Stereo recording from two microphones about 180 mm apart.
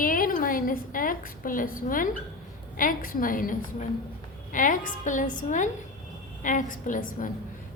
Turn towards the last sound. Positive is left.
turn(degrees=45)  # may be behind; listen again after turning